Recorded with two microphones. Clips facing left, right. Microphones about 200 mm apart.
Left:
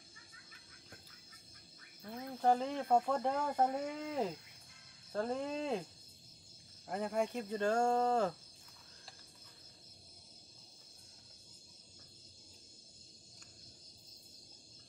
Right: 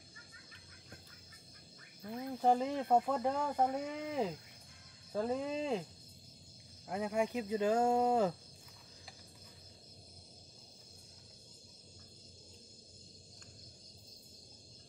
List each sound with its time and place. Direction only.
2.0 s speech: 10° right (ahead or behind)
6.9 s speech: centre (ahead or behind)